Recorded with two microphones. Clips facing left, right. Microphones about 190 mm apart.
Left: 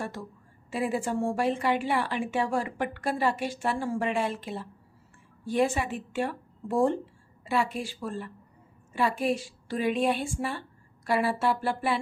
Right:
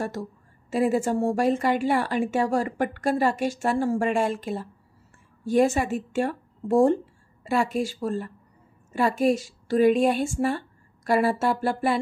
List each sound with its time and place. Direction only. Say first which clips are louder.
0.0 s a woman's voice: right 6 dB; 40° right (ahead or behind)